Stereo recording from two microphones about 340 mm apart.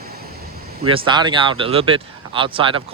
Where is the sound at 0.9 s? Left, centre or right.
Centre.